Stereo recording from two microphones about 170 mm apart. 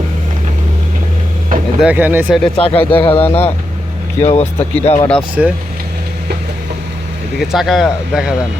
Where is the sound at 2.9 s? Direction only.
30° left (ahead or behind).